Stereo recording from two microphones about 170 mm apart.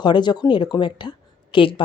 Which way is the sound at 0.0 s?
25° left (ahead or behind).